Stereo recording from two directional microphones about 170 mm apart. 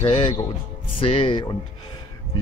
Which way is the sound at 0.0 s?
30° left (ahead or behind).